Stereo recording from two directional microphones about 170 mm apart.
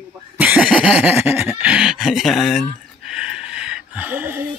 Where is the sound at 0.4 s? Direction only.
5° right (ahead or behind).